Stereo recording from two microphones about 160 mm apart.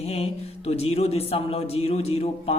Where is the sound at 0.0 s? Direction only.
40° left (ahead or behind).